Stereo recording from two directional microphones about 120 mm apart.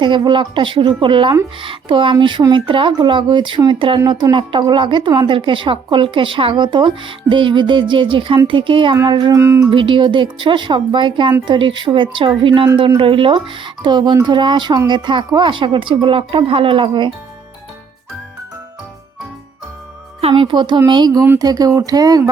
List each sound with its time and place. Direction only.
0.0 s speech: 40° right (ahead or behind)
9.3 s music: 25° right (ahead or behind)
9.6 s speech: 45° right (ahead or behind)
20.2 s speech: 45° right (ahead or behind)